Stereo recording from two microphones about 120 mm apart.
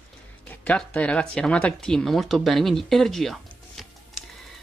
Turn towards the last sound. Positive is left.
turn(degrees=0)  # may be behind; listen again after turning